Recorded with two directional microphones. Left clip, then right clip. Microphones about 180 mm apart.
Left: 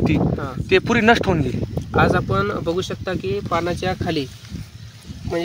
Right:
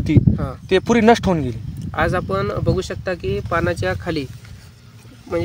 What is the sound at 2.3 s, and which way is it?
Speech, 5° left (ahead or behind).